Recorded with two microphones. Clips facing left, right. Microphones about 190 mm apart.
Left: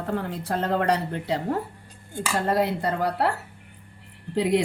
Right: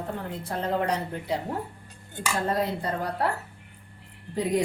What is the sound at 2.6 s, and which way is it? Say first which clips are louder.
Speech: left 4 dB; 70° left (ahead or behind).